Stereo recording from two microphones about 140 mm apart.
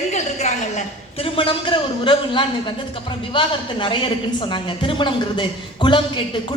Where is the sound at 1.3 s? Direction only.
35° left (ahead or behind).